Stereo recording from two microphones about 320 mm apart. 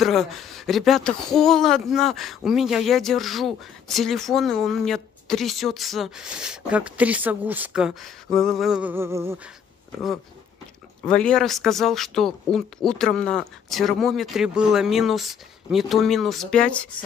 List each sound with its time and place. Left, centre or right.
0.0 s speech: centre
11.1 s speech: centre